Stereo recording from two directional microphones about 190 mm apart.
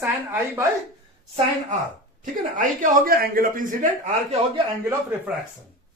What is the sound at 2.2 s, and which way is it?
Speech, 45° right (ahead or behind).